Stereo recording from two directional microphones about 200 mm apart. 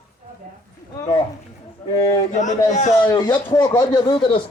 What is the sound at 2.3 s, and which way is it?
Speech, 35° left (ahead or behind).